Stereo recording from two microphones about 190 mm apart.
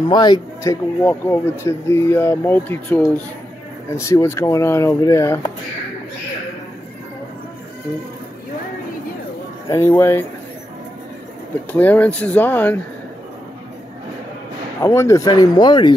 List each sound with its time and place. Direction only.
0.1 s speech: 20° left (ahead or behind)
1.0 s speech: 10° left (ahead or behind)
9.7 s speech: 10° left (ahead or behind)
11.7 s speech: 10° left (ahead or behind)
14.8 s speech: 15° left (ahead or behind)